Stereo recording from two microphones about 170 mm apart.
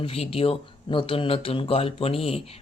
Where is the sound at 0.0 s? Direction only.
35° left (ahead or behind).